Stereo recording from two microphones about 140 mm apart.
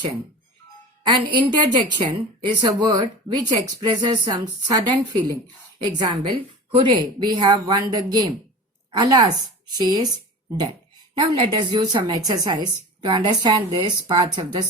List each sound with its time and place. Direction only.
1.0 s a woman's voice: 35° right (ahead or behind)
6.0 s a woman's voice: 40° right (ahead or behind)
11.1 s a woman's voice: 35° right (ahead or behind)